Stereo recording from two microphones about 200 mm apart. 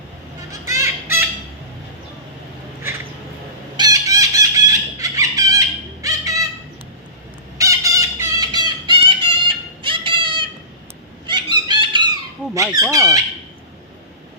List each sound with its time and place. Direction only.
0.6 s fowl: 15° right (ahead or behind)
3.8 s chicken: 20° right (ahead or behind)
7.6 s music: 15° right (ahead or behind)
11.3 s a sound: 25° right (ahead or behind)
12.7 s speech: 15° right (ahead or behind)